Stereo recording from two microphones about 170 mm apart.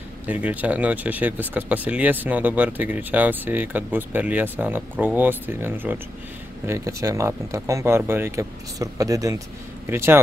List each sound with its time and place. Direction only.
0.3 s speech: 10° right (ahead or behind)